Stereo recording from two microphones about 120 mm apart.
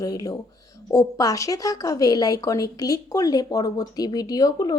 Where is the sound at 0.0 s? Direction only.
30° left (ahead or behind).